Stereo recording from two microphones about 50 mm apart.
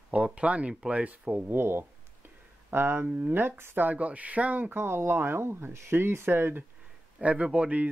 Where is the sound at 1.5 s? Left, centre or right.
Right.